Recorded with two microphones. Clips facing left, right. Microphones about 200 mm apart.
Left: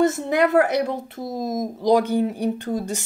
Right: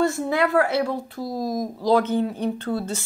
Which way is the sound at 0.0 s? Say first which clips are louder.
Left 2 dB; 20° left (ahead or behind).